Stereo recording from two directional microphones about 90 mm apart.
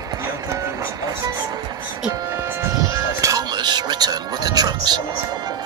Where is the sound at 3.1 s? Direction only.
40° right (ahead or behind).